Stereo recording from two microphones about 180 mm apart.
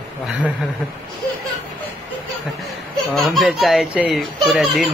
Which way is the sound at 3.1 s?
Centre (ahead or behind).